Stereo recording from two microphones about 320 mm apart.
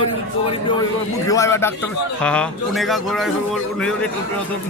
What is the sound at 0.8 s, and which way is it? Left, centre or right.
Speech, centre.